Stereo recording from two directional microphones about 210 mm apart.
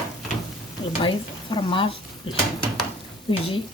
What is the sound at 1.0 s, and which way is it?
A woman's voice, 25° left (ahead or behind).